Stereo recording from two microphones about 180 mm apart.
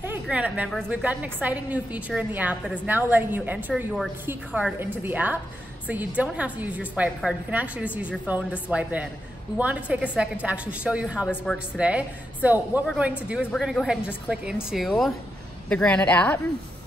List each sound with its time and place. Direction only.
0.0 s a woman's voice: 10° right (ahead or behind); by 16.3 s 5° left (ahead or behind)